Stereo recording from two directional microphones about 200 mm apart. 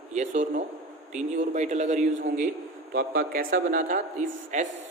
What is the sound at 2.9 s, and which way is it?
A man's voice, 45° right (ahead or behind).